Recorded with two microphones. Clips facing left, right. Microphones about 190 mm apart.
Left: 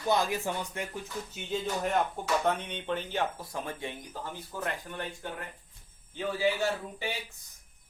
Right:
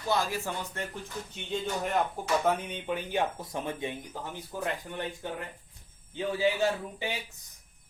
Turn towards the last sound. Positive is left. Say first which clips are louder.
# right 2 dB
turn(degrees=-15)  # may be behind; listen again after turning